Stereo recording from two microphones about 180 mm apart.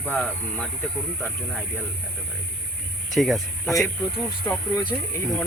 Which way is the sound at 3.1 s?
Centre (ahead or behind).